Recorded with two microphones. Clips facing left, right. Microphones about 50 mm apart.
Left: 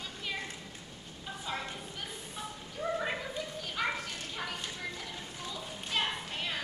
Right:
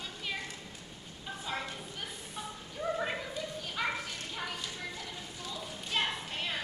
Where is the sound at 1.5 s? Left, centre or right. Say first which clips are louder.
Right 1 dB; centre.